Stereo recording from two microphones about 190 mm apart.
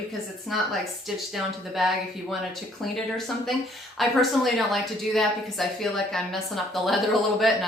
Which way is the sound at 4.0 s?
Centre (ahead or behind).